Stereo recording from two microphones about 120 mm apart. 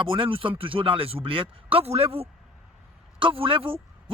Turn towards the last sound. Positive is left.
turn(degrees=-45)  # may be behind; listen again after turning